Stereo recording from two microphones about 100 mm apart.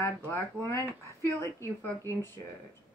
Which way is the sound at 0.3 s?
25° left (ahead or behind).